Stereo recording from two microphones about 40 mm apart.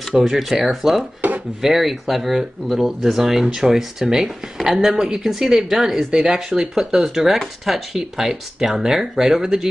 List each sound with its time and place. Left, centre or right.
0.3 s speech: centre